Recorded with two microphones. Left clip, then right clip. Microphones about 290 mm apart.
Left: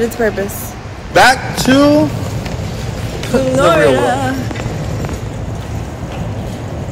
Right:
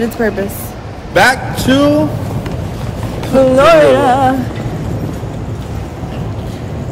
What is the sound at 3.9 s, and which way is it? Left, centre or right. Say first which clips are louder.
Music: right 4 dB; centre.